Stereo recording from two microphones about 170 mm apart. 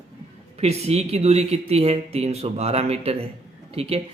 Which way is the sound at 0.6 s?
40° right (ahead or behind).